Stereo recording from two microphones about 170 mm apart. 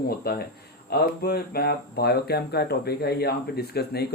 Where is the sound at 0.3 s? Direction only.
65° left (ahead or behind).